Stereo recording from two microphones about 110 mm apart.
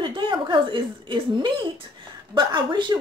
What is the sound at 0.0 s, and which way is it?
A woman's voice, 45° right (ahead or behind).